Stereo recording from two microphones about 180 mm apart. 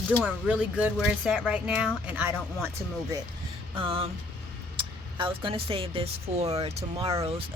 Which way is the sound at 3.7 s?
30° right (ahead or behind).